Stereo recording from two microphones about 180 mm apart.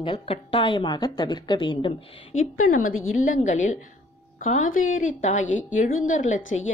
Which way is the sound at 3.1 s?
45° left (ahead or behind).